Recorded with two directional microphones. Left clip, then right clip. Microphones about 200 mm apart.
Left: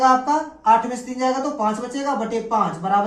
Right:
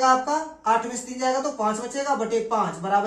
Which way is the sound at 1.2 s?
20° right (ahead or behind).